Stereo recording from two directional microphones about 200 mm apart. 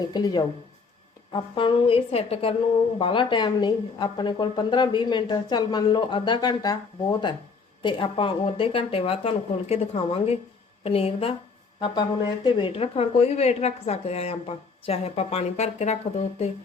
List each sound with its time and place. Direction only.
0.0 s speech: 20° left (ahead or behind)
12.5 s a woman's voice: 25° left (ahead or behind)